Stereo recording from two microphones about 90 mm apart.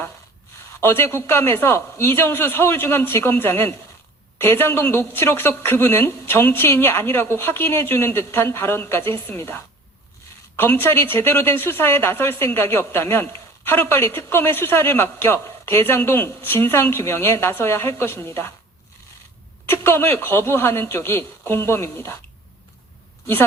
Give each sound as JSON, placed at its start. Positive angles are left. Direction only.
{"t": 0.8, "sound": "speech", "side_deg": 25}
{"t": 19.6, "sound": "speech", "side_deg": 25}